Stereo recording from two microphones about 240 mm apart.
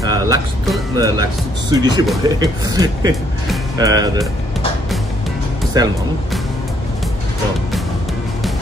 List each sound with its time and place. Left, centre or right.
0.0 s music: centre
0.9 s speech: centre
5.7 s speech: centre